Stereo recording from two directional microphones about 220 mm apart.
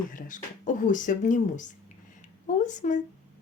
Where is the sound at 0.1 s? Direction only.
35° left (ahead or behind).